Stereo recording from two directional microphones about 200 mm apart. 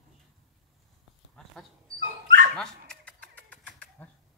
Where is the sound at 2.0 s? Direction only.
45° right (ahead or behind).